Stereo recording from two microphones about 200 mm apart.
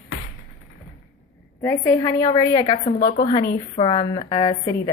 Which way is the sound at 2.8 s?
40° left (ahead or behind).